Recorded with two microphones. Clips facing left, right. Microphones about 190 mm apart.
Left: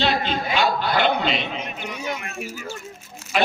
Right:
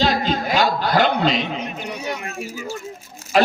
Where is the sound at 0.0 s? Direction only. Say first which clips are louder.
Right 3 dB; 40° right (ahead or behind).